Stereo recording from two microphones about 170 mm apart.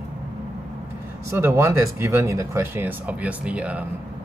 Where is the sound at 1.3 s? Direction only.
15° right (ahead or behind).